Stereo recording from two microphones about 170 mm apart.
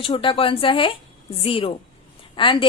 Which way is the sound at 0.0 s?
30° left (ahead or behind).